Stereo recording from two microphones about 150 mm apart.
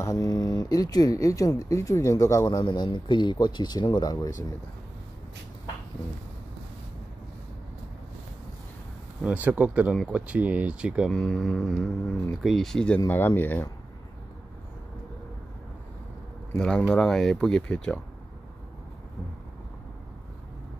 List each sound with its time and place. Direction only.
0.0 s speech: 25° left (ahead or behind)
9.2 s speech: 10° right (ahead or behind)
11.1 s speech: 5° left (ahead or behind)
13.0 s speech: 15° left (ahead or behind)
16.5 s speech: 5° left (ahead or behind)